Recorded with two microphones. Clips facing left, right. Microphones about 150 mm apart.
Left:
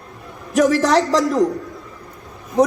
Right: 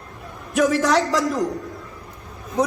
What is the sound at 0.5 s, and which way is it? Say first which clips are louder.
Speech: left 3 dB; 35° left (ahead or behind).